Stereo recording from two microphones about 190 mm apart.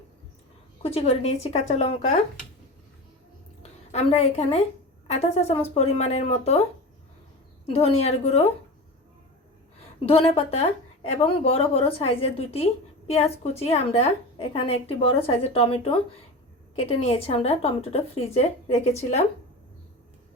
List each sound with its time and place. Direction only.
0.8 s a woman's voice: 30° left (ahead or behind)
3.6 s a woman's voice: 35° left (ahead or behind)
7.7 s a woman's voice: 35° left (ahead or behind)
10.1 s a woman's voice: 30° left (ahead or behind)